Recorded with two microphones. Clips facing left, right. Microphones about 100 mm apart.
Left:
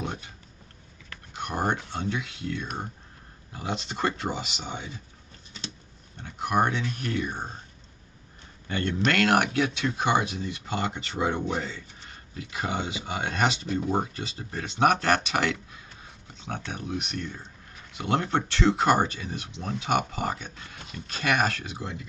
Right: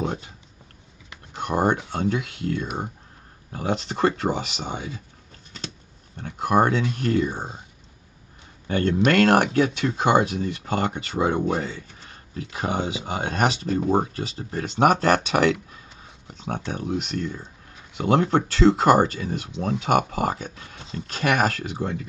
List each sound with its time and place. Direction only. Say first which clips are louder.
1.3 s speech: right 6 dB; 50° right (ahead or behind)
6.1 s speech: right 5 dB; 45° right (ahead or behind)
8.6 s speech: right 6 dB; 45° right (ahead or behind)